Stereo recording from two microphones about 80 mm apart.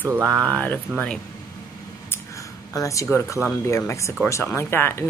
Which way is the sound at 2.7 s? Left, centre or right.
Left.